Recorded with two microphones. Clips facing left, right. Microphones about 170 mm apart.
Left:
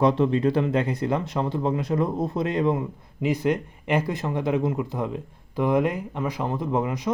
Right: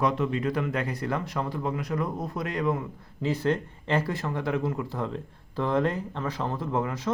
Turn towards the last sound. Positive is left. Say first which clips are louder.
# left 3 dB
turn(degrees=15)  # may be behind; listen again after turning